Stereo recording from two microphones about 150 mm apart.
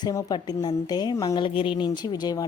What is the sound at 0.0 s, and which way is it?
Speech, 30° left (ahead or behind).